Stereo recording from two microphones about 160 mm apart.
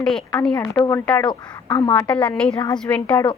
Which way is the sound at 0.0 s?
Centre (ahead or behind).